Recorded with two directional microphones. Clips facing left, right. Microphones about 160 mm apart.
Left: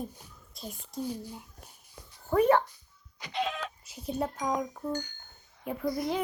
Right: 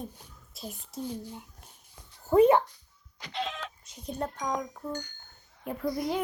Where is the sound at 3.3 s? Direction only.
10° left (ahead or behind).